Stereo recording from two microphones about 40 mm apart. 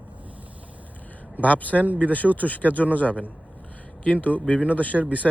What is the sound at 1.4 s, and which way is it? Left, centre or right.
Speech, left.